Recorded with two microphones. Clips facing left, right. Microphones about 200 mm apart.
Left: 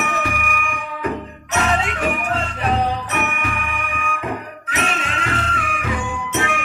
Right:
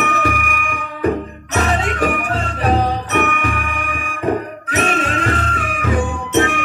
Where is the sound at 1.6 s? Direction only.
40° right (ahead or behind).